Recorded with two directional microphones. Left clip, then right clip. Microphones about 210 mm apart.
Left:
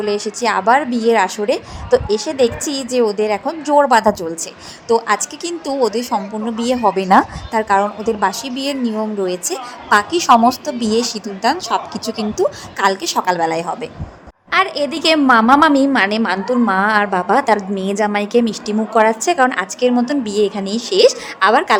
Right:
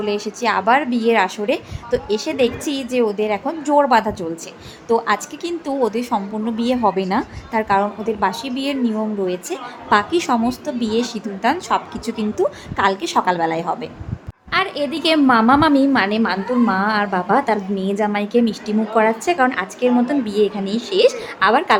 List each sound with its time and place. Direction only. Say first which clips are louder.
0.0 s a woman's voice: left 3 dB; 20° left (ahead or behind)